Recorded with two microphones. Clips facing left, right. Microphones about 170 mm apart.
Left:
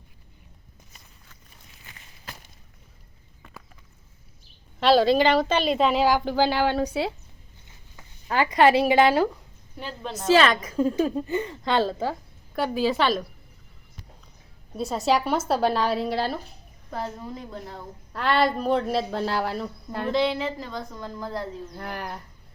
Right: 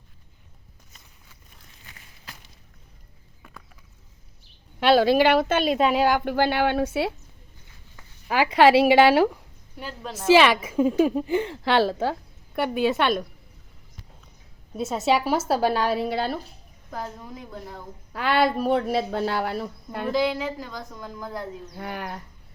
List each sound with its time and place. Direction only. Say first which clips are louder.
4.8 s a woman's voice: right 1 dB; 5° right (ahead or behind)
8.3 s speech: right 1 dB; 10° right (ahead or behind)
9.7 s a woman's voice: left 1 dB; 5° right (ahead or behind)
11.3 s speech: right 3 dB; 90° right; by 11.9 s 75° right (ahead or behind)
12.5 s a woman's voice: right 1 dB; centre (ahead or behind)
14.8 s a woman's voice: right 1 dB; centre (ahead or behind)